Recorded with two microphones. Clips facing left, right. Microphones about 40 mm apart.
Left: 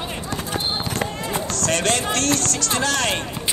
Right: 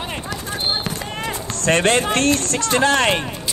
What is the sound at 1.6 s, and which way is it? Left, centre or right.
Speech, right.